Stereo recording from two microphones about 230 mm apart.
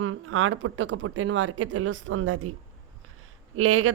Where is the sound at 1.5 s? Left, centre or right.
Right.